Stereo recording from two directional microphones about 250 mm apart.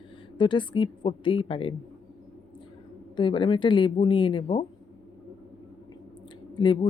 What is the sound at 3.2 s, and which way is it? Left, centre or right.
Speech, centre.